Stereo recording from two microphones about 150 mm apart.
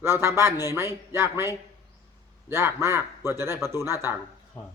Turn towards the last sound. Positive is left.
turn(degrees=-15)  # may be behind; listen again after turning